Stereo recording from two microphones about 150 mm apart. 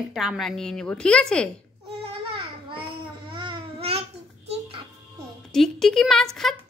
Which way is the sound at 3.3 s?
35° right (ahead or behind).